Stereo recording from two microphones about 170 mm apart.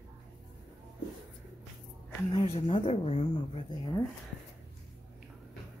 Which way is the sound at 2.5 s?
35° left (ahead or behind).